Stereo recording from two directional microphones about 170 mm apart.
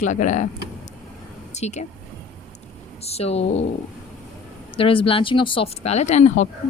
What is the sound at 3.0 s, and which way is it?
Speech, 35° left (ahead or behind).